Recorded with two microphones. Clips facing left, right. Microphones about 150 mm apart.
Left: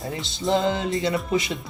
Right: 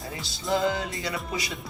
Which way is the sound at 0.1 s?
25° left (ahead or behind).